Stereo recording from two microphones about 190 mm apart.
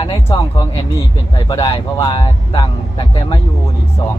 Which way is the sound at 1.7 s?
30° left (ahead or behind).